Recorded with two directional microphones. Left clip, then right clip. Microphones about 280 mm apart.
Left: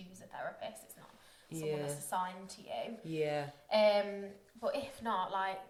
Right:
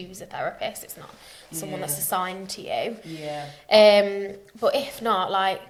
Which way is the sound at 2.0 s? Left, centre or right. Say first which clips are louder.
Right 14 dB; right.